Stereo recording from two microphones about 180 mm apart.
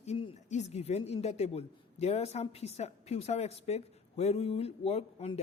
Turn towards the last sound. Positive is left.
turn(degrees=35)  # may be behind; listen again after turning